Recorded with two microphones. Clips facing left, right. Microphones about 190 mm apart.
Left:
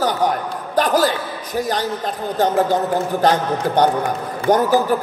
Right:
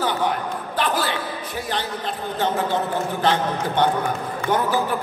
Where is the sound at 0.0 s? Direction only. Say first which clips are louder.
Left 4 dB; 40° left (ahead or behind).